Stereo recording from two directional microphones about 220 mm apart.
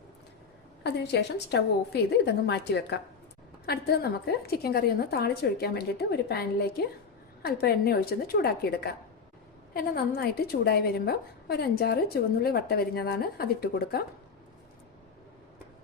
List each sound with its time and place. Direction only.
0.9 s a woman's voice: 50° left (ahead or behind)